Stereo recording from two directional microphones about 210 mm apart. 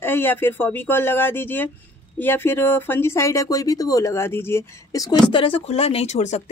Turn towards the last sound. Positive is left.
turn(degrees=30)  # may be behind; listen again after turning